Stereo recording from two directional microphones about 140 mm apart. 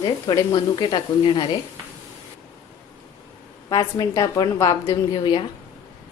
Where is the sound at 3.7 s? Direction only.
25° left (ahead or behind).